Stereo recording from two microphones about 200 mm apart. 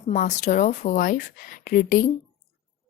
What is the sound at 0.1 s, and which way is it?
Speech, 40° left (ahead or behind).